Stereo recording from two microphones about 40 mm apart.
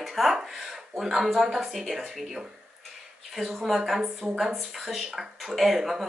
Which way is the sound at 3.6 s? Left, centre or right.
Centre.